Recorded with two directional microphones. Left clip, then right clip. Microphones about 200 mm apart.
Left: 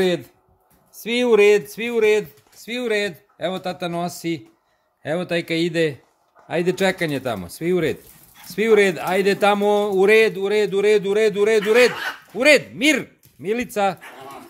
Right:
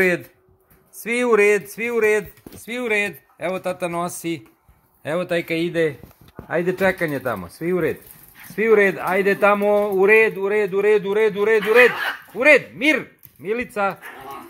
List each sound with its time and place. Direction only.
0.9 s speech: 30° left (ahead or behind)